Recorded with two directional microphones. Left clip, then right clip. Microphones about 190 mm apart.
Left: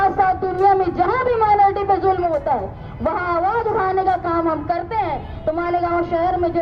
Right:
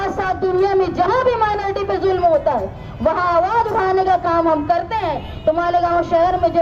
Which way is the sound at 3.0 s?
50° right (ahead or behind).